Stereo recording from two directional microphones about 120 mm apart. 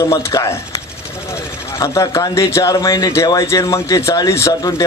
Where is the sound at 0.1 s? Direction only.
25° left (ahead or behind).